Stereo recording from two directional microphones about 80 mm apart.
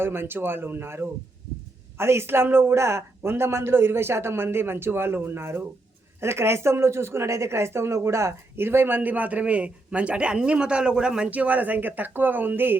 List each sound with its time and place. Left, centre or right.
0.0 s speech: right